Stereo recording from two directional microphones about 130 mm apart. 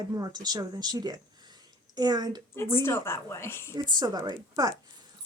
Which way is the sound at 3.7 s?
30° right (ahead or behind).